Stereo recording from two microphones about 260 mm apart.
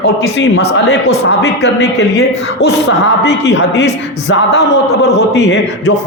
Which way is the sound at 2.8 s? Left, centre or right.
Left.